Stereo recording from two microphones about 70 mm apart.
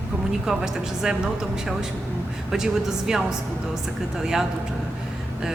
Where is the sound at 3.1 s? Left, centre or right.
Centre.